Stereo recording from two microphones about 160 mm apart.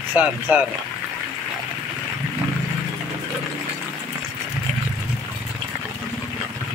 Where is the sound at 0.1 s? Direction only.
10° right (ahead or behind).